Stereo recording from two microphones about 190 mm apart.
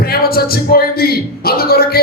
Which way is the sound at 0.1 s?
55° left (ahead or behind).